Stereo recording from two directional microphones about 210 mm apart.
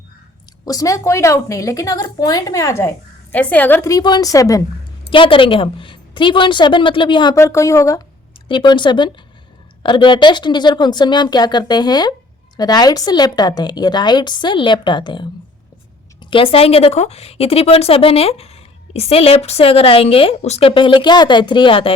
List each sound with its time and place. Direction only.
0.6 s a woman's voice: 15° left (ahead or behind)